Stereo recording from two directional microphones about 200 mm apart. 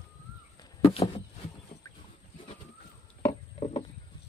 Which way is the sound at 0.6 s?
25° left (ahead or behind).